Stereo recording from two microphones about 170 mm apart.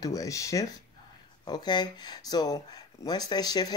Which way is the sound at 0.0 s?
20° left (ahead or behind).